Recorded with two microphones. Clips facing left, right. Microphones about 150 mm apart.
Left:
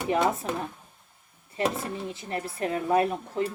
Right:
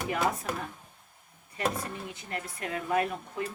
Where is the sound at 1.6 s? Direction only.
30° left (ahead or behind).